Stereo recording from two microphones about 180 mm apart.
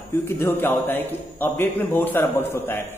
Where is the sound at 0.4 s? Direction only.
10° left (ahead or behind).